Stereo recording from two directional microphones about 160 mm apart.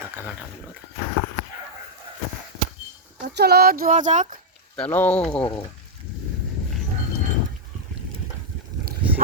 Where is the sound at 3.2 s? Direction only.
90° right; by 4.3 s 50° right (ahead or behind).